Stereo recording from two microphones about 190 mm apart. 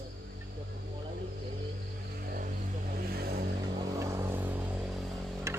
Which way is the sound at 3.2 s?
55° right (ahead or behind).